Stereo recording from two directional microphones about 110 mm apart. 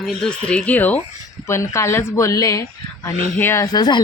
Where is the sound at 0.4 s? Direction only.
10° left (ahead or behind).